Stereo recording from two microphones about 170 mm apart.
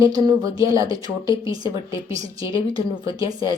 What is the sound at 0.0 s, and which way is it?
Speech, 20° right (ahead or behind).